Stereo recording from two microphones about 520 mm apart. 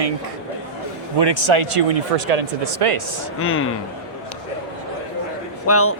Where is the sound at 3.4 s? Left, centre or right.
Left.